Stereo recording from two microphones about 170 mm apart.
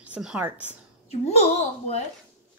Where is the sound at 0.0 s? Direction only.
5° right (ahead or behind).